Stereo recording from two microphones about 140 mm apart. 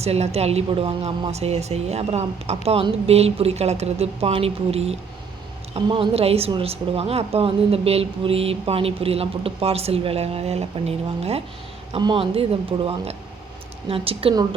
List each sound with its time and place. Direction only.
0.0 s a woman's voice: 50° right (ahead or behind)
11.9 s speech: 35° right (ahead or behind)